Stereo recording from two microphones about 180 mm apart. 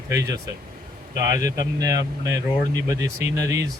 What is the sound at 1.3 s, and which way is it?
Speech, 20° right (ahead or behind).